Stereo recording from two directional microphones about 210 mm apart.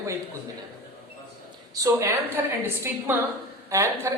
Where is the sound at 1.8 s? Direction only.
15° right (ahead or behind).